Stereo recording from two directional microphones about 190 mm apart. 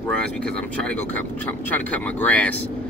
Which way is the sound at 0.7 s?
10° left (ahead or behind).